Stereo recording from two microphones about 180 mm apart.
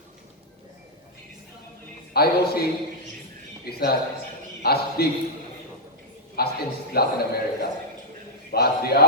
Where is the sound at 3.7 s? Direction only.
60° left (ahead or behind).